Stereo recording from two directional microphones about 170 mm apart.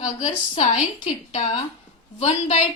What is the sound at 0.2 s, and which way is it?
A woman's voice, 40° left (ahead or behind).